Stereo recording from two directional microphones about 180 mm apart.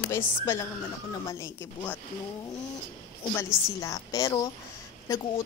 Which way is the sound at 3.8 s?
20° left (ahead or behind).